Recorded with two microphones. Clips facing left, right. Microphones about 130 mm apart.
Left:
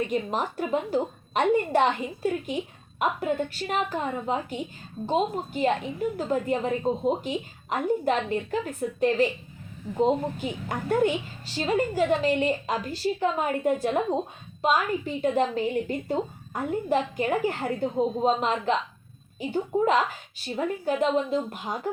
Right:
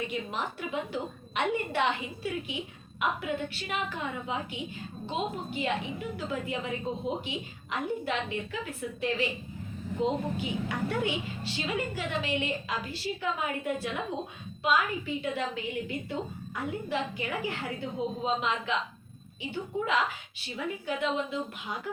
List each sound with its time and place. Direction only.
0.1 s a woman's voice: 40° left (ahead or behind)